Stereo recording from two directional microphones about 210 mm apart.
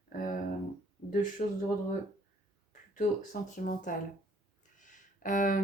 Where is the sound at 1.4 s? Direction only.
30° left (ahead or behind).